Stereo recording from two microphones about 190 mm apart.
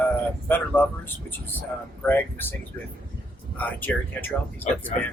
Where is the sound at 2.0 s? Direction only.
10° left (ahead or behind).